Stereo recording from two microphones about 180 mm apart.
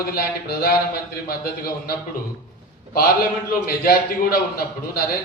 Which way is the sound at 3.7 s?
55° left (ahead or behind).